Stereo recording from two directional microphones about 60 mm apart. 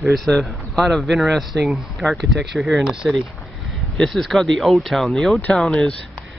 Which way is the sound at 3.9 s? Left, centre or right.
Centre.